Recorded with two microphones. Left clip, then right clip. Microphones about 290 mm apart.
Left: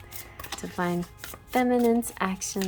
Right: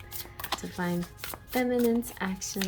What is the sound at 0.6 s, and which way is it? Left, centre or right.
Speech, centre.